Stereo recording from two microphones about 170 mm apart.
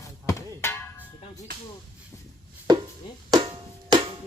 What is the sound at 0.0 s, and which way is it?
Music, 20° left (ahead or behind).